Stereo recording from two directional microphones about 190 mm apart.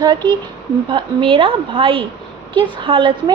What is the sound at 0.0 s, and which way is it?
A woman's voice, 25° right (ahead or behind).